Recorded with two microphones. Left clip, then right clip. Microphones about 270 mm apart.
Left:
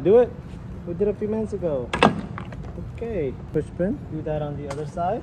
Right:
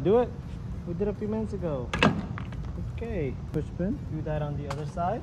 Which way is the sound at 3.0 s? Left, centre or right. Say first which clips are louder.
Left 6 dB; centre.